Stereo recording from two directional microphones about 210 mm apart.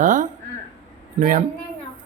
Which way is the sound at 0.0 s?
35° right (ahead or behind).